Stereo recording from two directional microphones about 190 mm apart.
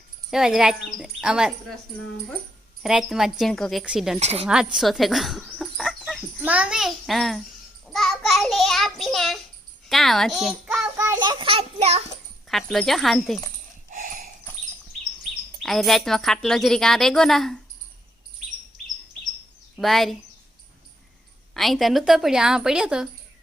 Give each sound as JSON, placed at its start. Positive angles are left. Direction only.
{"t": 0.3, "sound": "a woman's voice", "side_deg": 0}
{"t": 2.8, "sound": "a woman's voice", "side_deg": -5}
{"t": 4.2, "sound": "speech", "side_deg": -35}
{"t": 4.4, "sound": "a woman's voice", "side_deg": -5}
{"t": 10.9, "sound": "a sound", "side_deg": -15}
{"t": 12.5, "sound": "a woman's voice", "side_deg": 0}
{"t": 13.9, "sound": "dog", "side_deg": -45}
{"t": 15.6, "sound": "a woman's voice", "side_deg": 0}
{"t": 19.7, "sound": "a woman's voice", "side_deg": 0}
{"t": 21.5, "sound": "a woman's voice", "side_deg": 0}